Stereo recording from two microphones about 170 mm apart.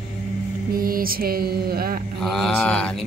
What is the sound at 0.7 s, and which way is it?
Mantra, 60° right (ahead or behind).